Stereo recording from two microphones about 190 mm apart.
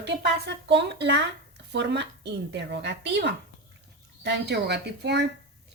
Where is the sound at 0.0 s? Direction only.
65° right (ahead or behind).